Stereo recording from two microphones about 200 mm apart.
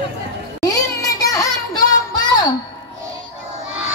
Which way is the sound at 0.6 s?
15° left (ahead or behind).